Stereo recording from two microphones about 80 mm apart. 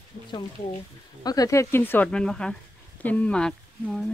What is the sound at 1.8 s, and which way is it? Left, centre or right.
Speech, left.